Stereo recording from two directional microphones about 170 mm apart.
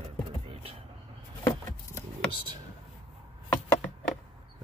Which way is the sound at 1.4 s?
20° left (ahead or behind).